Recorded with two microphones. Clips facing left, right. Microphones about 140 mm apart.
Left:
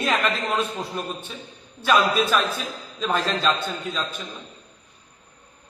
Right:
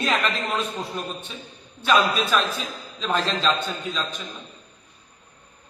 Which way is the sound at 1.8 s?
10° left (ahead or behind).